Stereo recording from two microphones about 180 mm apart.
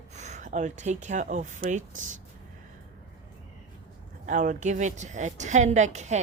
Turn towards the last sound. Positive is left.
turn(degrees=-40)  # may be behind; listen again after turning